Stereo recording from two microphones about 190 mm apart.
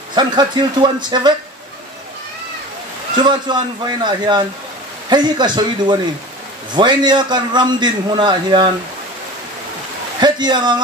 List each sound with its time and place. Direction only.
0.1 s a man's voice: 25° right (ahead or behind)
3.2 s a man's voice: 25° right (ahead or behind)
10.2 s a man's voice: 25° right (ahead or behind)